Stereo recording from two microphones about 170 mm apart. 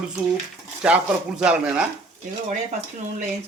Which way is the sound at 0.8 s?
5° right (ahead or behind).